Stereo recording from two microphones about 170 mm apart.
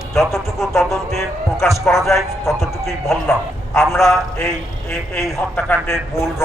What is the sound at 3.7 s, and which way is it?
Speech, 15° left (ahead or behind).